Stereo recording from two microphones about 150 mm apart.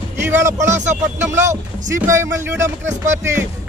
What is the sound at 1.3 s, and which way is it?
Speech, 20° right (ahead or behind).